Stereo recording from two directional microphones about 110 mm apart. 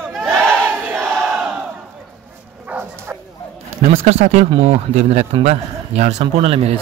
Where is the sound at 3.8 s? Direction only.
85° right.